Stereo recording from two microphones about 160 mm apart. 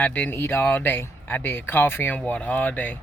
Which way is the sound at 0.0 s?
10° left (ahead or behind).